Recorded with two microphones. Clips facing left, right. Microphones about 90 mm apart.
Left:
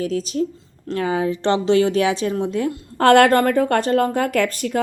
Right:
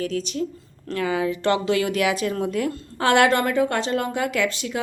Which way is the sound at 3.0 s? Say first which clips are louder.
Left 5 dB; 50° left (ahead or behind).